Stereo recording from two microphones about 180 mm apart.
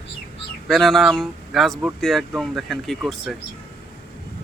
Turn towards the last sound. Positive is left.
turn(degrees=0)  # may be behind; listen again after turning